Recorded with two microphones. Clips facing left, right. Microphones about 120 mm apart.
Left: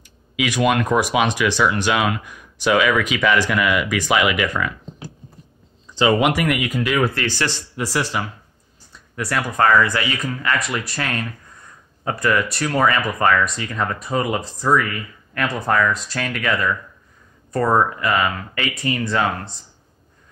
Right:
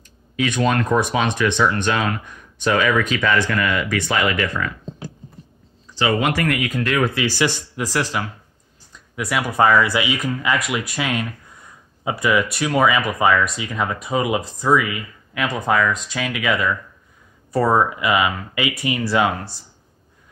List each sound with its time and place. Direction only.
0.0 s a sound: 10° left (ahead or behind)
1.0 s speech: 10° left (ahead or behind)
7.2 s speech: 10° right (ahead or behind)
7.7 s speech: centre (ahead or behind)